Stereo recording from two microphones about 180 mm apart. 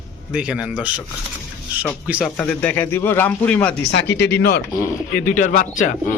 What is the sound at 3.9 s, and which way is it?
Speech, 70° left (ahead or behind).